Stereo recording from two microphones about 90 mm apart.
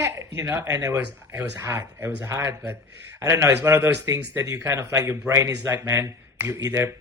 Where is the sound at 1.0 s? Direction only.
20° right (ahead or behind).